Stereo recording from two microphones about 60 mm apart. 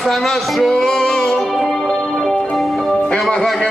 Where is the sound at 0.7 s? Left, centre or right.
Centre.